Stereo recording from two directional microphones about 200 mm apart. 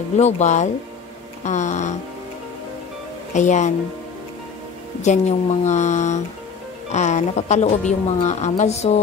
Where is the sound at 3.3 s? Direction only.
35° left (ahead or behind).